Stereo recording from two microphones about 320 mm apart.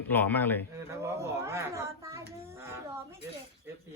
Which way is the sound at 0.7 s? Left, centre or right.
Centre.